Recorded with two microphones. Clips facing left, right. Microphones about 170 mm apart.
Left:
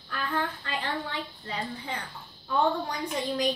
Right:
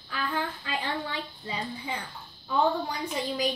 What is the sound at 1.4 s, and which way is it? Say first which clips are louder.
Speech: right 2 dB; 10° right (ahead or behind).